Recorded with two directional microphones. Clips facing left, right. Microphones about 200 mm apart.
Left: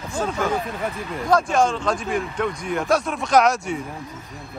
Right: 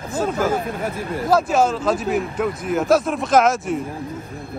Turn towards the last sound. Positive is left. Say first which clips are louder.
# right 2 dB
turn(degrees=0)  # may be behind; listen again after turning